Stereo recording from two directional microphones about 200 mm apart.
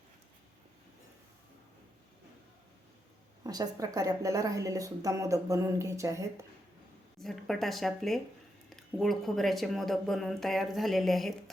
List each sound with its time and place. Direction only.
3.4 s speech: 20° right (ahead or behind)
7.2 s speech: centre (ahead or behind)